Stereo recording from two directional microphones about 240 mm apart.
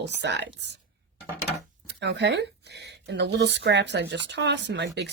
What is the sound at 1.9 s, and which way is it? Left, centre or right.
A woman's voice, right.